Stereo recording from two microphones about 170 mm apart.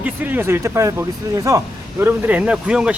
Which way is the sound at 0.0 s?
10° right (ahead or behind).